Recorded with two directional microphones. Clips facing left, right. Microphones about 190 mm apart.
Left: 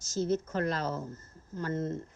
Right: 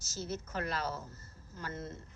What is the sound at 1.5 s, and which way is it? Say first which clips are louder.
Speech: left 8 dB; 30° left (ahead or behind).